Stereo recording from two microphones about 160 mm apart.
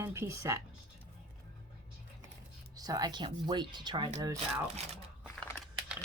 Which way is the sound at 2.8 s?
25° right (ahead or behind).